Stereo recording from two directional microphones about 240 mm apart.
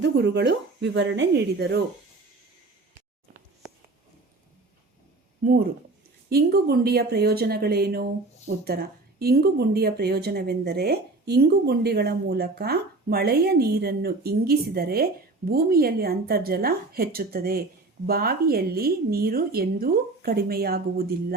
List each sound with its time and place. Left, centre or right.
0.0 s a woman's voice: right
5.4 s speech: right